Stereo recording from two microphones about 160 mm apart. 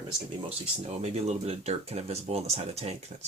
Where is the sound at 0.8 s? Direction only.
40° right (ahead or behind).